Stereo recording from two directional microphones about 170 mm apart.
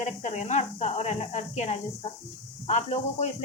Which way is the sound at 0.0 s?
40° left (ahead or behind).